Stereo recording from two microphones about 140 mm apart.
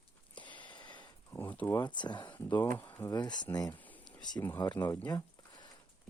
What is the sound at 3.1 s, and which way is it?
Speech, 30° left (ahead or behind).